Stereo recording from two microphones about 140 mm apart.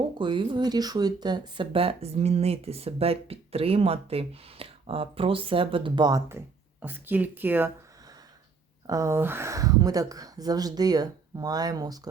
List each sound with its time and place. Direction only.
0.2 s speech: 35° right (ahead or behind); by 7.7 s 15° right (ahead or behind)
8.9 s speech: 20° right (ahead or behind)